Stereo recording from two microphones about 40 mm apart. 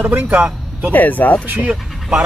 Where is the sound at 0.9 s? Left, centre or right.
Left.